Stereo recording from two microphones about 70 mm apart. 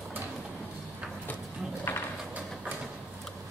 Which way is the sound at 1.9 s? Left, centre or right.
Left.